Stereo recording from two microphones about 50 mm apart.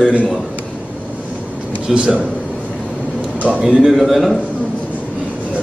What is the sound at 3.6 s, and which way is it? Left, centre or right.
Speech, centre.